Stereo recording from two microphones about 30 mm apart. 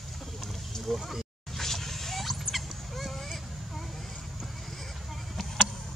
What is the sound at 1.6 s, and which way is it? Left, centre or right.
Vehicle, centre.